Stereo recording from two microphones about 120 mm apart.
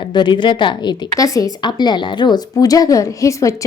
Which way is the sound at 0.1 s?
40° left (ahead or behind).